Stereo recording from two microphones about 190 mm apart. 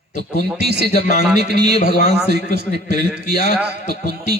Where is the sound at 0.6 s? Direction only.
60° right (ahead or behind).